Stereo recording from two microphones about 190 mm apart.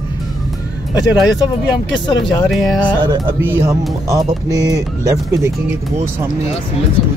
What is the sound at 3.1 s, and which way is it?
Speech, 10° right (ahead or behind).